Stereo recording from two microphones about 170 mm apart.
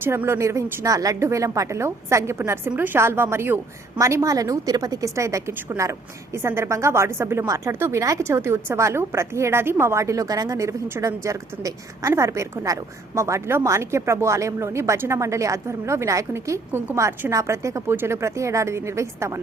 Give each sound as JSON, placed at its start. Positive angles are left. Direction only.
{"t": 0.0, "sound": "a woman's voice", "side_deg": -15}